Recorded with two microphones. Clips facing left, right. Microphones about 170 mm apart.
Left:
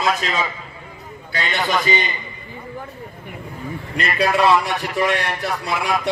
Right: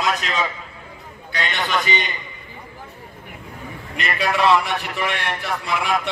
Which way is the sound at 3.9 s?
35° left (ahead or behind).